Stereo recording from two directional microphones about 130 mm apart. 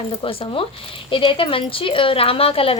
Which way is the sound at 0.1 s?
40° left (ahead or behind).